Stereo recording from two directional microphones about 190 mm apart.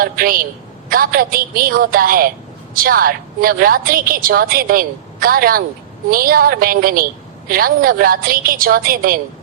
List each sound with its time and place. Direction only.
0.0 s a woman's voice: 50° right (ahead or behind)